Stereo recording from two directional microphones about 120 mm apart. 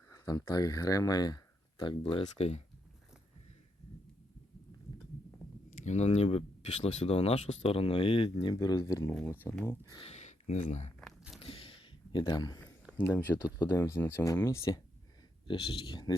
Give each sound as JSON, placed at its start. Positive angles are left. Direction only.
{"t": 0.1, "sound": "speech", "side_deg": 30}
{"t": 2.2, "sound": "speech", "side_deg": 65}
{"t": 5.8, "sound": "speech", "side_deg": 70}
{"t": 9.2, "sound": "speech", "side_deg": 15}
{"t": 10.0, "sound": "a sound", "side_deg": 65}
{"t": 11.3, "sound": "a sound", "side_deg": 50}
{"t": 13.0, "sound": "speech", "side_deg": 20}
{"t": 15.4, "sound": "speech", "side_deg": 45}